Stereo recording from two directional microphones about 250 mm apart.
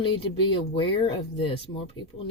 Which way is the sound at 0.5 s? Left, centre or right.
Left.